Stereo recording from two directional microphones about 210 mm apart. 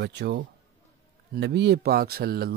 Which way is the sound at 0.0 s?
55° right (ahead or behind).